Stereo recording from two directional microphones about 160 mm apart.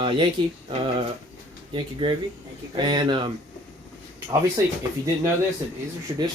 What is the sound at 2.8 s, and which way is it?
Speech, 30° right (ahead or behind).